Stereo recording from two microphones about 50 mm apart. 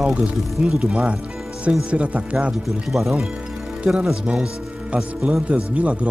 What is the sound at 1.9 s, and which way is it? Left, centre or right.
Speech, right.